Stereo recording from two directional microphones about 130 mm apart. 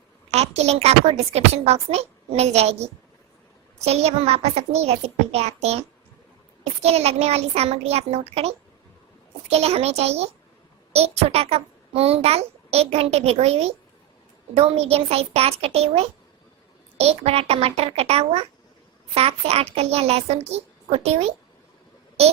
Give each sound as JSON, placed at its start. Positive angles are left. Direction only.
{"t": 0.3, "sound": "a woman's voice", "side_deg": -55}
{"t": 6.8, "sound": "a child's voice", "side_deg": -55}